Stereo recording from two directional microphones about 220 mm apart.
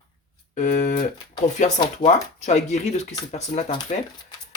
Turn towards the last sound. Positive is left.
turn(degrees=30)  # may be behind; listen again after turning